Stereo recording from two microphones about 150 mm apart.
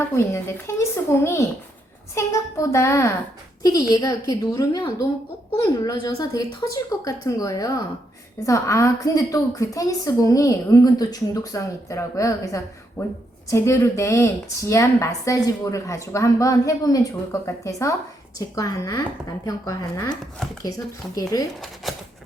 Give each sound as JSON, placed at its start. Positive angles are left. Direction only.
{"t": 0.0, "sound": "a woman's voice", "side_deg": 15}
{"t": 21.2, "sound": "speech", "side_deg": 25}
{"t": 21.9, "sound": "a sound", "side_deg": 0}